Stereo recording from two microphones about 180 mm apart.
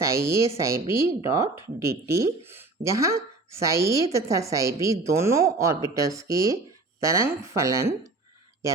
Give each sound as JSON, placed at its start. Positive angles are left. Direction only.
{"t": 0.0, "sound": "speech", "side_deg": -15}